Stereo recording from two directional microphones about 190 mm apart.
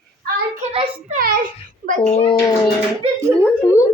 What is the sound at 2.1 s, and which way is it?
Speech, 35° left (ahead or behind).